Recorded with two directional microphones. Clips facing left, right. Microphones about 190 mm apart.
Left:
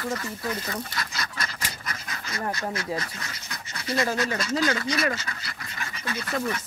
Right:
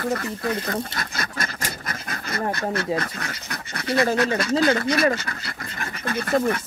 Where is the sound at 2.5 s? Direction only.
60° right (ahead or behind).